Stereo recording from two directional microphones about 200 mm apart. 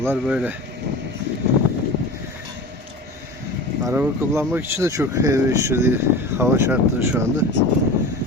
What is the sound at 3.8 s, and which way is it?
Speech, 10° right (ahead or behind).